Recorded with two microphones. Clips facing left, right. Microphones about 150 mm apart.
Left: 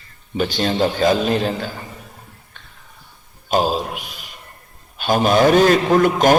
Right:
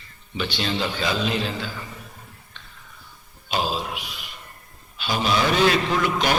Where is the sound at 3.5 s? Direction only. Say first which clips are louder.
Left 7 dB; 45° left (ahead or behind).